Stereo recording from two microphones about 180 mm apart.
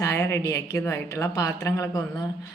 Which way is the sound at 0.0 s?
15° left (ahead or behind).